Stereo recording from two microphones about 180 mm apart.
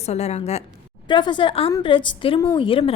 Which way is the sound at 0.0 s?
35° left (ahead or behind).